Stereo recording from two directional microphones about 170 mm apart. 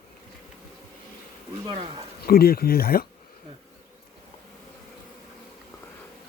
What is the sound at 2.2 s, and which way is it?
Speech, 60° left (ahead or behind).